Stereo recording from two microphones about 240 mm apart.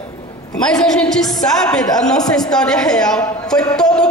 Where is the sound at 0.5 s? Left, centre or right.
Centre.